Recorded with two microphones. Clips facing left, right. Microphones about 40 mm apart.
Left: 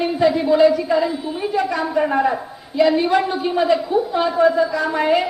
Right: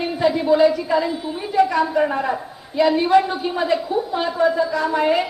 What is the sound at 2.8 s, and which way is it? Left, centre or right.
A woman's voice, centre.